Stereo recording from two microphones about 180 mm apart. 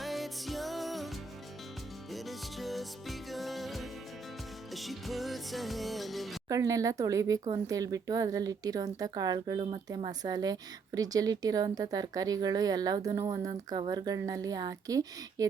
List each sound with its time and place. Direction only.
0.0 s music: centre (ahead or behind)
2.1 s music: centre (ahead or behind)
6.5 s speech: 20° right (ahead or behind)